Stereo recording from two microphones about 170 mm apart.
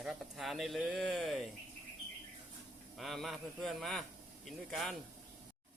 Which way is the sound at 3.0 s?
Centre (ahead or behind).